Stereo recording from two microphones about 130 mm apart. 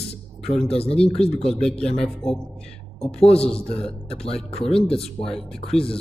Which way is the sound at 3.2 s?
50° left (ahead or behind).